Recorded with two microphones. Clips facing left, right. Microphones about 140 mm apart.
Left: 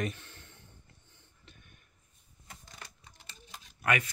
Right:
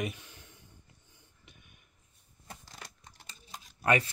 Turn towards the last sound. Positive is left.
turn(degrees=-30)  # may be behind; listen again after turning